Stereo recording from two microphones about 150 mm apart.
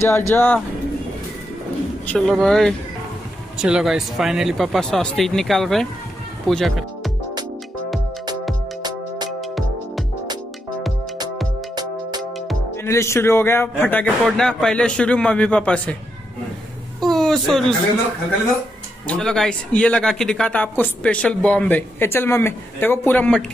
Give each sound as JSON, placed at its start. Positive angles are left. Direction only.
{"t": 0.0, "sound": "speech", "side_deg": 20}
{"t": 2.0, "sound": "speech", "side_deg": 5}
{"t": 9.4, "sound": "music", "side_deg": 0}
{"t": 11.7, "sound": "music", "side_deg": -25}
{"t": 12.2, "sound": "music", "side_deg": 0}
{"t": 12.7, "sound": "speech", "side_deg": 20}
{"t": 17.0, "sound": "a sound", "side_deg": 0}
{"t": 19.0, "sound": "speech", "side_deg": 5}